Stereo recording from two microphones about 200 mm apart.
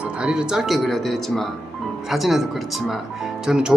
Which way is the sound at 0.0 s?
5° right (ahead or behind).